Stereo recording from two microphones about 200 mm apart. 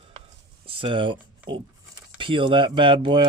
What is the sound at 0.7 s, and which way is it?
Speech, 25° right (ahead or behind).